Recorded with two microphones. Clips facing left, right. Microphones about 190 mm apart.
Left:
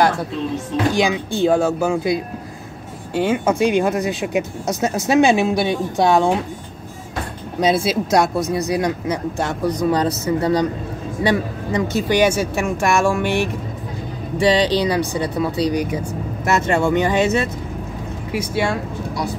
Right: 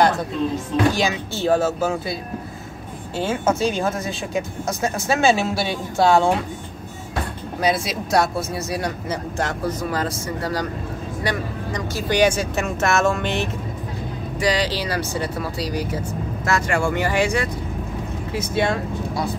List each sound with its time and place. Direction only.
0.9 s speech: 15° left (ahead or behind)
1.6 s speech: 5° right (ahead or behind)
3.2 s speech: 15° left (ahead or behind)
7.6 s speech: 30° left (ahead or behind)
8.4 s speech: 15° left (ahead or behind)
12.1 s speech: 10° left (ahead or behind)
14.4 s speech: 25° left (ahead or behind)
16.4 s speech: 25° left (ahead or behind)
18.3 s speech: 10° left (ahead or behind)